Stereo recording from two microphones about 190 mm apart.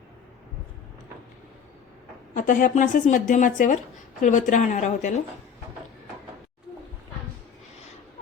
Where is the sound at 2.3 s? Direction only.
45° left (ahead or behind).